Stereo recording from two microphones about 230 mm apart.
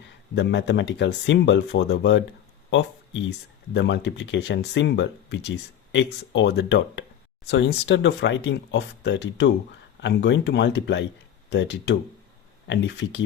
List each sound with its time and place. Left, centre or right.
0.3 s speech: left